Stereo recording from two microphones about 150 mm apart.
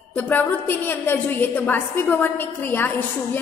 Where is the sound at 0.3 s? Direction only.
15° left (ahead or behind).